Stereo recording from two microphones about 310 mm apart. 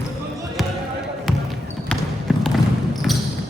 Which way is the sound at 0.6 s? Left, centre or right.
Centre.